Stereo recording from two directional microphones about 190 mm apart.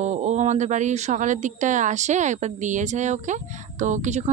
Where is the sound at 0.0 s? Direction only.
35° right (ahead or behind).